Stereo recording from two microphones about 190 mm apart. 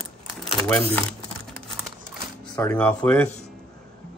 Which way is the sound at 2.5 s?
5° left (ahead or behind).